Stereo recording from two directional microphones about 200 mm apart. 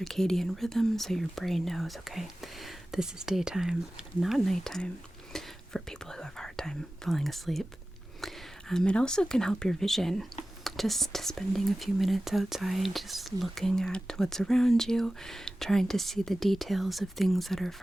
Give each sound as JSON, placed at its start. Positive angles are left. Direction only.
{"t": 0.0, "sound": "speech", "side_deg": 0}
{"t": 8.2, "sound": "a sound", "side_deg": 0}
{"t": 8.7, "sound": "speech", "side_deg": 5}